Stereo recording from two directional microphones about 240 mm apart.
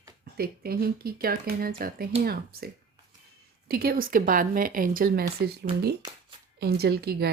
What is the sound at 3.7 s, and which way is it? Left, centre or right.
Speech, right.